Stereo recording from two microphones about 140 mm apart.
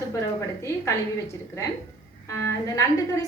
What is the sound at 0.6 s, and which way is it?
A woman's voice, 20° left (ahead or behind).